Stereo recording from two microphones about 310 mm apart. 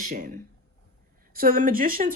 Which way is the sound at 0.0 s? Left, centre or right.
Right.